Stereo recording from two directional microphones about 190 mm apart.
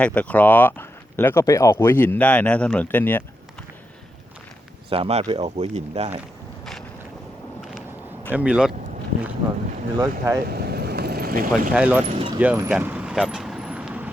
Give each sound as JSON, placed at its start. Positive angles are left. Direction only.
{"t": 0.0, "sound": "speech", "side_deg": 5}
{"t": 4.9, "sound": "speech", "side_deg": -30}
{"t": 7.6, "sound": "a sound", "side_deg": -5}
{"t": 8.3, "sound": "speech", "side_deg": -5}
{"t": 10.0, "sound": "speech", "side_deg": -15}
{"t": 10.4, "sound": "boat", "side_deg": -55}
{"t": 11.7, "sound": "speech", "side_deg": -10}
{"t": 12.0, "sound": "a sound", "side_deg": -25}
{"t": 12.4, "sound": "vehicle", "side_deg": -10}